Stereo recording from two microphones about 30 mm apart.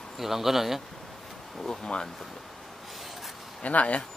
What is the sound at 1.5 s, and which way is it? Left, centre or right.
Speech, left.